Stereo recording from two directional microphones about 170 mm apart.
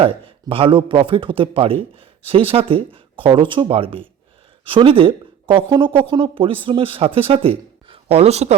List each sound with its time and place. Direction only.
0.0 s speech: 30° right (ahead or behind)